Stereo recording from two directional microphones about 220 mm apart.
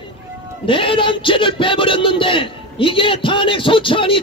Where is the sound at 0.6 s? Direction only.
25° left (ahead or behind).